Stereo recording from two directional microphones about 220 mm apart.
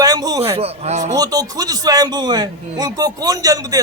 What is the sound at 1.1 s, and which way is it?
A man's voice, 15° right (ahead or behind).